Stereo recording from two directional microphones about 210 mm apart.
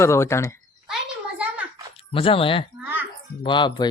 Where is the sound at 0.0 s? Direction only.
15° left (ahead or behind).